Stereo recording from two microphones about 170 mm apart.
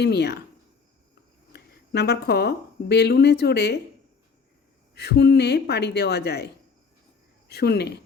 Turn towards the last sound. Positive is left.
turn(degrees=75)  # may be behind; listen again after turning